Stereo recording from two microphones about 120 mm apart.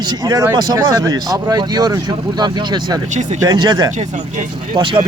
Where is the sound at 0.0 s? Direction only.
35° right (ahead or behind).